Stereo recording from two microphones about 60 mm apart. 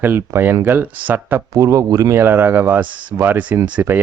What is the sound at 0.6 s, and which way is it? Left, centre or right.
Speech, right.